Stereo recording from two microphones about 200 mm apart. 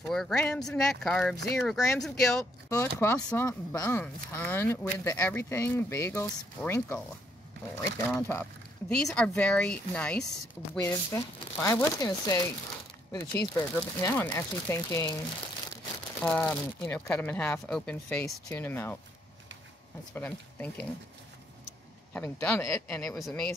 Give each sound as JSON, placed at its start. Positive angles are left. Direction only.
{"t": 0.0, "sound": "speech", "side_deg": 0}
{"t": 2.7, "sound": "speech", "side_deg": 15}
{"t": 8.1, "sound": "speech", "side_deg": 10}
{"t": 16.2, "sound": "speech", "side_deg": 10}
{"t": 20.2, "sound": "speech", "side_deg": 10}
{"t": 22.1, "sound": "speech", "side_deg": 10}